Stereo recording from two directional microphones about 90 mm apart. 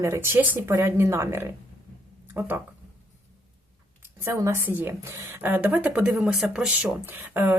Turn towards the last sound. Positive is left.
turn(degrees=-25)  # may be behind; listen again after turning